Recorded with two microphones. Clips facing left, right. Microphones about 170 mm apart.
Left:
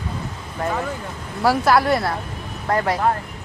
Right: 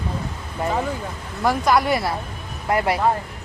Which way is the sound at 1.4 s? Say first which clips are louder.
Left 2 dB; 5° left (ahead or behind).